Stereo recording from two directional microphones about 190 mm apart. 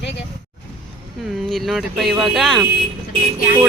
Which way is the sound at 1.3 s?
Centre (ahead or behind).